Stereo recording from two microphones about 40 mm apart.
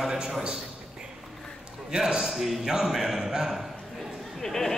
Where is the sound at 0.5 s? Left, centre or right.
Centre.